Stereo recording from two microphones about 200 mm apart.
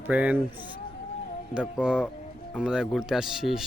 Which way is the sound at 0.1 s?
5° right (ahead or behind).